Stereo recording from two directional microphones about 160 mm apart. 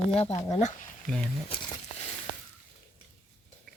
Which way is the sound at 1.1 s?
5° left (ahead or behind).